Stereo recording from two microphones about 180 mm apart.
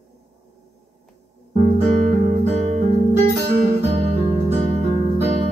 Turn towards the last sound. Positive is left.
turn(degrees=-35)  # may be behind; listen again after turning